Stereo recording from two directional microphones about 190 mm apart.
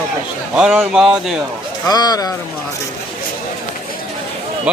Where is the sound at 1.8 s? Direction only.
20° left (ahead or behind).